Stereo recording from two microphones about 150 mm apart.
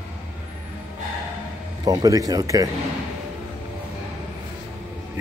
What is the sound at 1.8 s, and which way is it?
Speech, 25° right (ahead or behind).